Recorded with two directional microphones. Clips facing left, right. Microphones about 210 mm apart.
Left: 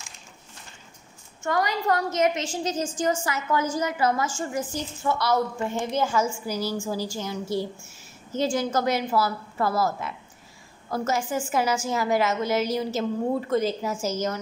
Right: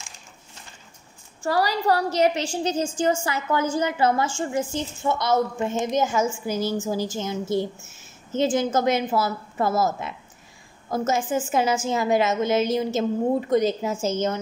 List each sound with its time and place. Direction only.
1.4 s a woman's voice: 35° right (ahead or behind)